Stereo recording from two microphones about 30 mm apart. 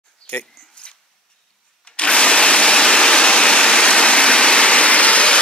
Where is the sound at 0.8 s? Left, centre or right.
Left.